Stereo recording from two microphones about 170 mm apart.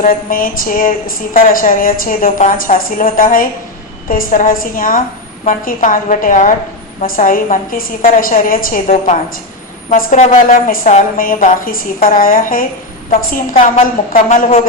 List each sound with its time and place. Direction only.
0.0 s a woman's voice: 55° left (ahead or behind)
8.9 s a woman's voice: 45° left (ahead or behind)